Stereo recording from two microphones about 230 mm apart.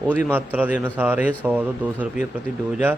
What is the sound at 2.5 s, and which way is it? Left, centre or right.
Speech, left.